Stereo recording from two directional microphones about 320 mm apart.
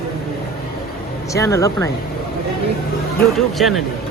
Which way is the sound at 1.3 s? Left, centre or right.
Centre.